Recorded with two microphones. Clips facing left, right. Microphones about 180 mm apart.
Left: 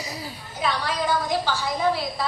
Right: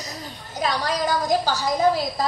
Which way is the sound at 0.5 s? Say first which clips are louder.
Right 2 dB; 40° right (ahead or behind).